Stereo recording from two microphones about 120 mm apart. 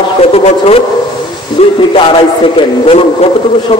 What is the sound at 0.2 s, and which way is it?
Speech, 55° left (ahead or behind).